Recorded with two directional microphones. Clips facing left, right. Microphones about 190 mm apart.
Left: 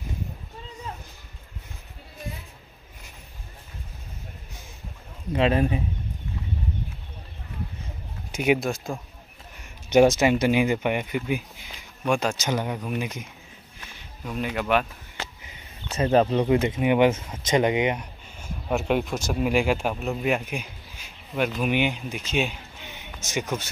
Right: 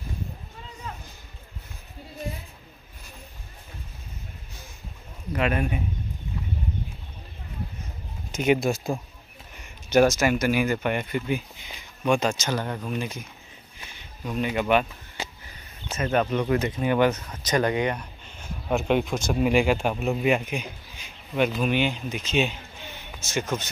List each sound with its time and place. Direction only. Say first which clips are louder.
5.3 s speech: left 4 dB; 30° left (ahead or behind)
8.3 s a sound: even; 10° left (ahead or behind)
8.5 s speech: right 3 dB; 5° right (ahead or behind)
9.8 s speech: left 2 dB; 20° left (ahead or behind); by 12.4 s 5° left (ahead or behind)
12.4 s speech: left 1 dB; 15° left (ahead or behind)
14.2 s speech: right 2 dB; centre (ahead or behind)
16.0 s speech: left 4 dB; 30° left (ahead or behind)
18.4 s speech: right 1 dB; 5° left (ahead or behind)
21.6 s speech: even; 15° left (ahead or behind)